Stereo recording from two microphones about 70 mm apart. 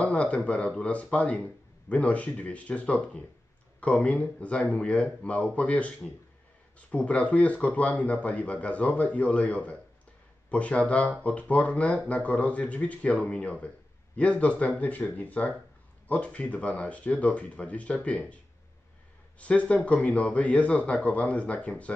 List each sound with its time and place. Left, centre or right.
0.0 s a man's voice: centre